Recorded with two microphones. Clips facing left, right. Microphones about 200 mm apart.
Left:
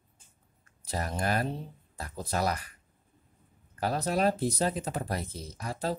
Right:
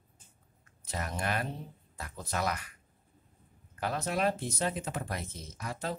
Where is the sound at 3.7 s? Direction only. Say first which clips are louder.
Left 4 dB; 35° left (ahead or behind).